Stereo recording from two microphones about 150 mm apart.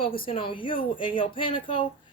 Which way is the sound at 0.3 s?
35° left (ahead or behind).